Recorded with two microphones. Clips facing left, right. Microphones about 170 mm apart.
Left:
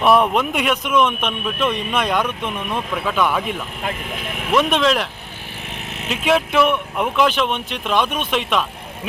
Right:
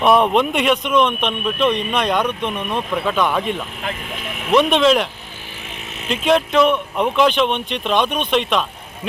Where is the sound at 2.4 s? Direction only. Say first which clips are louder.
Right 2 dB; 15° right (ahead or behind).